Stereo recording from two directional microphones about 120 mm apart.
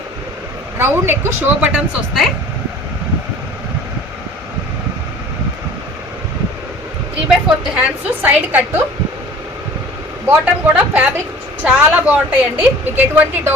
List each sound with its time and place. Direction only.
0.8 s speech: 20° right (ahead or behind)
1.7 s speech: centre (ahead or behind)
7.8 s a woman's voice: 15° right (ahead or behind)
10.2 s a woman's voice: 10° right (ahead or behind)